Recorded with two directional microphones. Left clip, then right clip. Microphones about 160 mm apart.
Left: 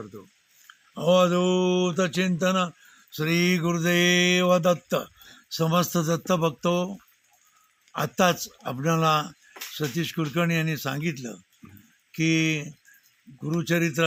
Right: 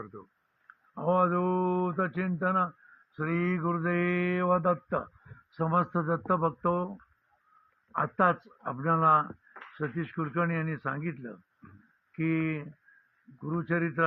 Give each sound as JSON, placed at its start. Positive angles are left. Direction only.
{"t": 0.9, "sound": "mantra", "side_deg": 40}
{"t": 7.9, "sound": "mantra", "side_deg": 40}